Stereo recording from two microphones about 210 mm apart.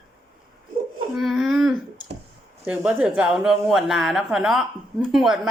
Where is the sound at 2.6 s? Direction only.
5° right (ahead or behind).